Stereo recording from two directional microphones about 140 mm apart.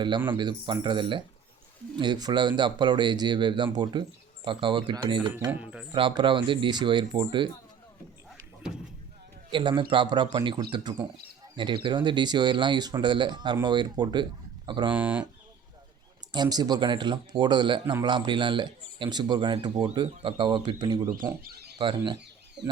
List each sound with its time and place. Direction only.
0.3 s a man's voice: 35° right (ahead or behind)
5.5 s speech: 10° right (ahead or behind)
5.9 s a man's voice: 35° right (ahead or behind)
9.5 s a man's voice: 35° right (ahead or behind)
14.9 s speech: 10° right (ahead or behind)
16.3 s a man's voice: 30° right (ahead or behind)